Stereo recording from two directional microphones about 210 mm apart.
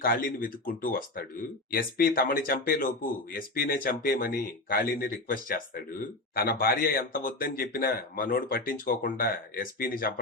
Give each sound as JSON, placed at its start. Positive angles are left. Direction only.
{"t": 0.0, "sound": "speech", "side_deg": 40}